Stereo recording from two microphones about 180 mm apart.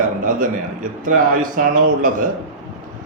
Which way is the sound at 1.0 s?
50° right (ahead or behind).